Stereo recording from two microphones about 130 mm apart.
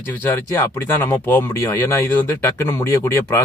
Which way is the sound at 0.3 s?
15° left (ahead or behind).